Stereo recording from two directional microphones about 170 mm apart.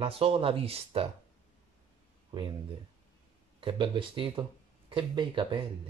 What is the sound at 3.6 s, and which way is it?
Speech, 30° right (ahead or behind).